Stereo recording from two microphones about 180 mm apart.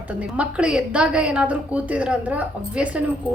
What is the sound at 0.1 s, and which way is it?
A woman's voice, 5° right (ahead or behind).